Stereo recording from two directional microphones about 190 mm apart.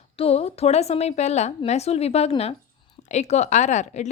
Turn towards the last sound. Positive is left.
turn(degrees=40)  # may be behind; listen again after turning